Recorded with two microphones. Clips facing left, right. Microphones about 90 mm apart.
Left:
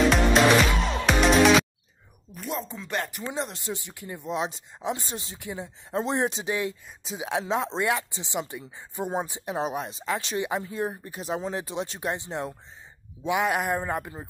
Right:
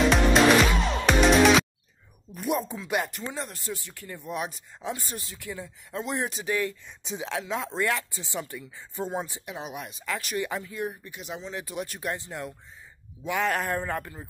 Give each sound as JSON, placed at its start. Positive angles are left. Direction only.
{"t": 0.1, "sound": "music", "side_deg": 0}
{"t": 2.4, "sound": "speech", "side_deg": -10}
{"t": 3.3, "sound": "speech", "side_deg": 20}
{"t": 9.5, "sound": "speech", "side_deg": 35}
{"t": 11.6, "sound": "speech", "side_deg": 25}
{"t": 13.2, "sound": "speech", "side_deg": 15}